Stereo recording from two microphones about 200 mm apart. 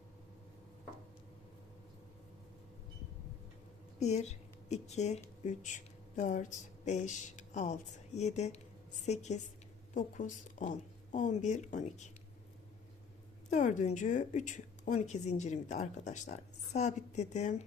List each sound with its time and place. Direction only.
4.0 s a woman's voice: 35° left (ahead or behind)
13.5 s a woman's voice: 40° left (ahead or behind)